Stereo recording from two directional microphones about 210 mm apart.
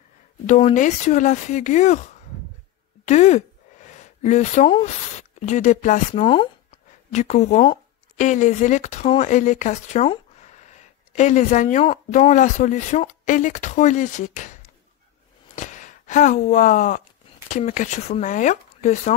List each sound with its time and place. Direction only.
0.5 s speech: 35° left (ahead or behind)
6.2 s speech: 25° left (ahead or behind)
15.5 s a sound: 35° left (ahead or behind)
17.5 s speech: 35° left (ahead or behind)